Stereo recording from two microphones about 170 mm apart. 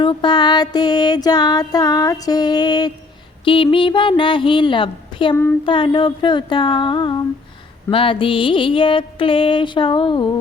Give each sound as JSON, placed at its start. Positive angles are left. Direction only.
{"t": 0.0, "sound": "music", "side_deg": 25}